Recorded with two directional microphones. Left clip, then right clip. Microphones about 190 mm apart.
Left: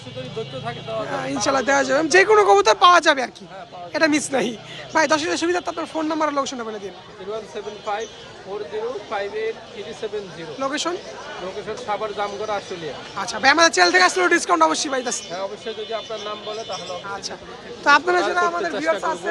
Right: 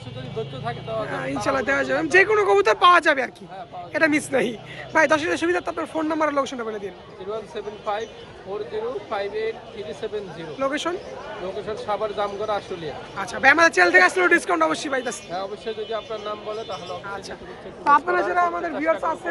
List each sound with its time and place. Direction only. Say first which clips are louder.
1.0 s speech: left 3 dB; 10° left (ahead or behind)
7.5 s speech: left 1 dB; 20° left (ahead or behind)
9.0 s speech: left 1 dB; 20° left (ahead or behind)
10.6 s speech: even; 10° left (ahead or behind)
13.1 s speech: even; 10° left (ahead or behind)
17.9 s a man's voice: left 1 dB; 60° left (ahead or behind)
18.3 s speech: left 1 dB; 10° left (ahead or behind)